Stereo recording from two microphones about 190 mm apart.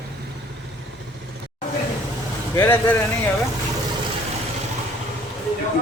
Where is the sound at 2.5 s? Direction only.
15° left (ahead or behind).